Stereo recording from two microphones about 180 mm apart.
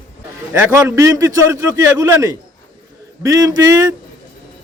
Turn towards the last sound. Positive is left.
turn(degrees=-20)  # may be behind; listen again after turning